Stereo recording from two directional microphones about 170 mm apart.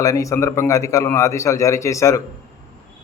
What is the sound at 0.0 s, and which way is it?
A man's voice, 20° left (ahead or behind).